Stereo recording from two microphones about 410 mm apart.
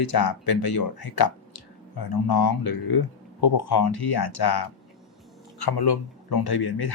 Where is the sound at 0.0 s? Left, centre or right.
Left.